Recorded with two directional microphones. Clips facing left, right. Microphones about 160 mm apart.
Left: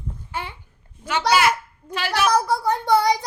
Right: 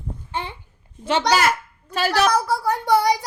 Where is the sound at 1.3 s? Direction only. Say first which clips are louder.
Left 3 dB; 40° right (ahead or behind).